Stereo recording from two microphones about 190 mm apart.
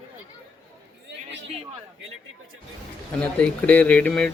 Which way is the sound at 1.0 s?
75° right (ahead or behind).